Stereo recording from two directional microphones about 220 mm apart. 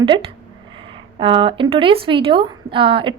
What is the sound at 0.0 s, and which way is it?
A woman's voice, 25° right (ahead or behind).